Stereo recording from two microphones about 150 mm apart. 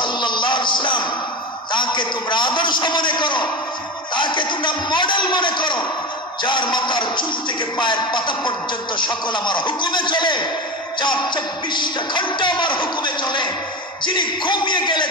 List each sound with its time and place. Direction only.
0.0 s music: 30° left (ahead or behind)
1.7 s speech: 30° left (ahead or behind)